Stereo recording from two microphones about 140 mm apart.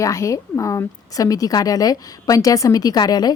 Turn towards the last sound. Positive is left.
turn(degrees=30)  # may be behind; listen again after turning